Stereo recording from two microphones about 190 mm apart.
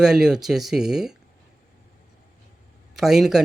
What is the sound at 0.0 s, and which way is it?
Speech, centre (ahead or behind).